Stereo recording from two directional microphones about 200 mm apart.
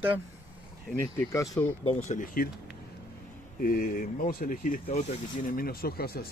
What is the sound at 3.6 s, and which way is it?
Speech, 45° left (ahead or behind).